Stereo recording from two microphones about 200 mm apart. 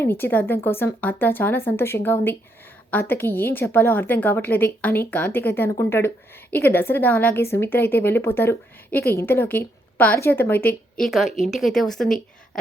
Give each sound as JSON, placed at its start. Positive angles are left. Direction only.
{"t": 0.0, "sound": "a woman's voice", "side_deg": 10}